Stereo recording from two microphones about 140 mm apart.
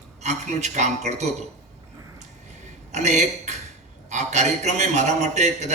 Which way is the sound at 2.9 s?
55° right (ahead or behind).